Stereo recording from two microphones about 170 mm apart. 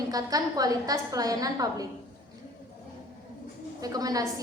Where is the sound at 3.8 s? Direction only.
20° right (ahead or behind).